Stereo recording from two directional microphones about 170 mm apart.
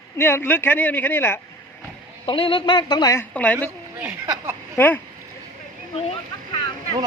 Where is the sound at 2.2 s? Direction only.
30° left (ahead or behind); by 3.5 s 10° left (ahead or behind).